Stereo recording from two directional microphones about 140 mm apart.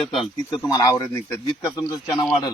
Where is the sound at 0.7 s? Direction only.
25° left (ahead or behind).